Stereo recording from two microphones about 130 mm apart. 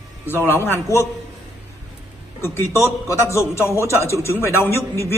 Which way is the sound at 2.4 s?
20° left (ahead or behind).